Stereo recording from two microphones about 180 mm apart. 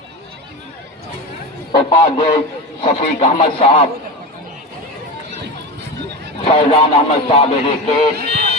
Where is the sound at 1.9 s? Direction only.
35° left (ahead or behind).